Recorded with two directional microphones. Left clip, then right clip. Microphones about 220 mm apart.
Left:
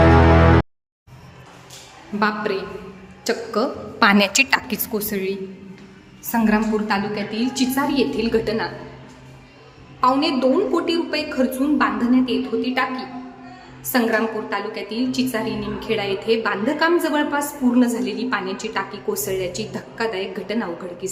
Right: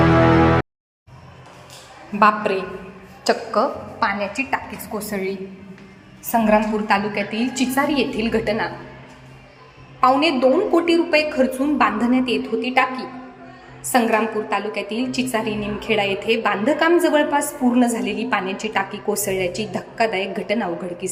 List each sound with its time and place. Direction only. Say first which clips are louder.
2.1 s a woman's voice: right 5 dB; 5° right (ahead or behind)
4.0 s a woman's voice: left 6 dB; 45° left (ahead or behind)
4.9 s a woman's voice: even; 15° left (ahead or behind)
6.3 s a woman's voice: right 3 dB; centre (ahead or behind)
10.2 s a woman's voice: right 2 dB; 5° right (ahead or behind)